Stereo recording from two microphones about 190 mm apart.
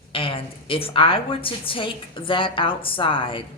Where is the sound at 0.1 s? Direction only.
30° left (ahead or behind).